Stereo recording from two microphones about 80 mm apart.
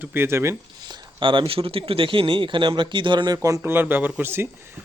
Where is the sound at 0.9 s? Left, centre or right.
Right.